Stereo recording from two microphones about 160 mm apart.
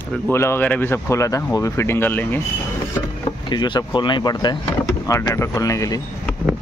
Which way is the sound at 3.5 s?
30° left (ahead or behind).